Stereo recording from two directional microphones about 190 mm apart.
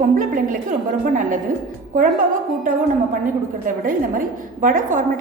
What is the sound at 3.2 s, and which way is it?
A woman's voice, 45° right (ahead or behind).